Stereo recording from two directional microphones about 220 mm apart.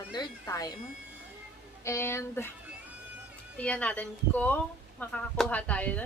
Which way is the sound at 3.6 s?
5° left (ahead or behind).